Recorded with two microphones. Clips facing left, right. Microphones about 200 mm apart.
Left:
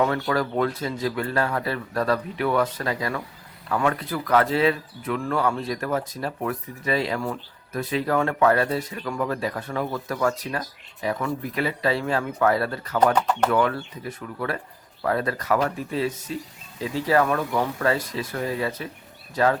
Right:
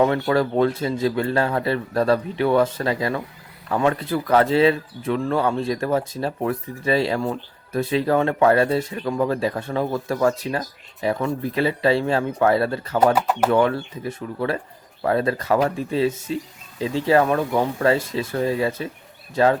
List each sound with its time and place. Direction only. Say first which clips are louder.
0.0 s speech: right 4 dB; 25° right (ahead or behind)
13.1 s speech: right 2 dB; 10° right (ahead or behind)
13.5 s speech: right 4 dB; 30° right (ahead or behind)